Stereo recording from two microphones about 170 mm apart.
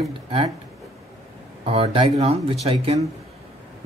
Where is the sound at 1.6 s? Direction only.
35° right (ahead or behind).